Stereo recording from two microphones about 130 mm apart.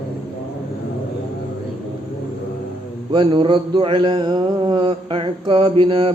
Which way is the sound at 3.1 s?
40° right (ahead or behind).